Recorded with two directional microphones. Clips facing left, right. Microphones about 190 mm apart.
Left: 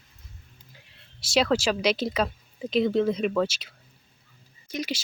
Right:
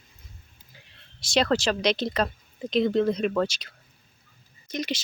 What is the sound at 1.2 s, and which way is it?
Speech, 5° left (ahead or behind).